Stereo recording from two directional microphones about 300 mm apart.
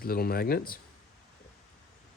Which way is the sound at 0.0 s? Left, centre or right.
Left.